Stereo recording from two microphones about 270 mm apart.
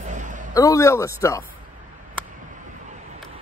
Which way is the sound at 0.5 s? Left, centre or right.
Centre.